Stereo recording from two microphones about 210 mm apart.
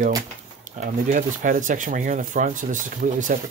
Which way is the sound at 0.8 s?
40° right (ahead or behind).